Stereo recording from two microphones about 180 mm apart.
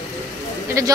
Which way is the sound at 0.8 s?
15° right (ahead or behind).